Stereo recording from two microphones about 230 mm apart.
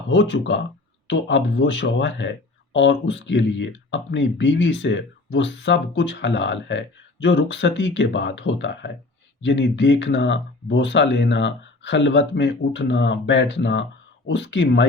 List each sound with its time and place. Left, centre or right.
0.1 s speech: left